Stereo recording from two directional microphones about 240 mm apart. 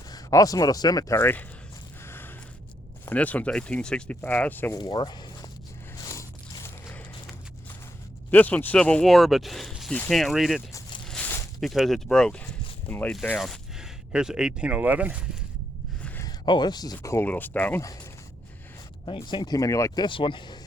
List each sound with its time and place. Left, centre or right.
0.1 s speech: centre
2.0 s a sound: centre
3.1 s speech: centre
6.0 s zipper: centre
8.3 s speech: centre
10.7 s zipper: centre
11.1 s speech: centre
16.0 s a sound: centre
16.5 s speech: centre
19.0 s speech: centre